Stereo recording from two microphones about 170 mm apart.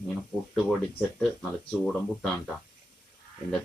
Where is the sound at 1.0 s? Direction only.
5° left (ahead or behind).